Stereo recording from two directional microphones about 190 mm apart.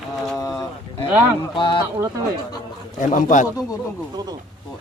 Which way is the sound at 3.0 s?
40° left (ahead or behind).